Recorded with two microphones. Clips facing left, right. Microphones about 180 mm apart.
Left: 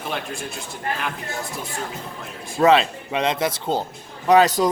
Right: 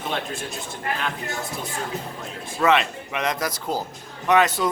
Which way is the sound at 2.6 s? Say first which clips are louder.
Left 4 dB; 30° left (ahead or behind).